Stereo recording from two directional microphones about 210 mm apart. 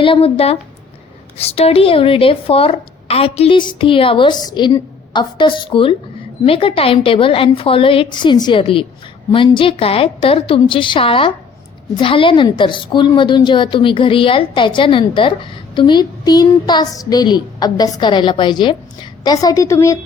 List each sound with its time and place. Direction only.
0.0 s a woman's voice: 25° left (ahead or behind)